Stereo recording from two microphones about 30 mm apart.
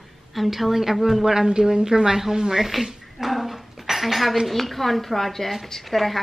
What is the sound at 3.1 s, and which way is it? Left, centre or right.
Dishes, centre.